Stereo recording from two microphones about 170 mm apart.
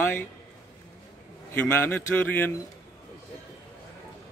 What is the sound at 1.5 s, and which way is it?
Speech, 15° left (ahead or behind).